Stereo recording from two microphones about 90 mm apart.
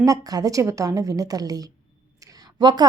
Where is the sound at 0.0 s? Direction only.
45° right (ahead or behind).